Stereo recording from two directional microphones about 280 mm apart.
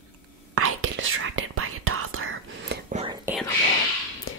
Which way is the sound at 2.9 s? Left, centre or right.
Right.